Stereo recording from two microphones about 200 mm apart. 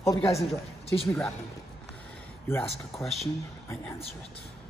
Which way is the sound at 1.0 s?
5° left (ahead or behind).